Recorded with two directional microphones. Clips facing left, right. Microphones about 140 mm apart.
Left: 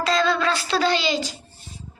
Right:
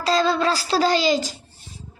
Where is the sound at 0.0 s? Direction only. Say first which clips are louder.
Right 1 dB; 35° right (ahead or behind).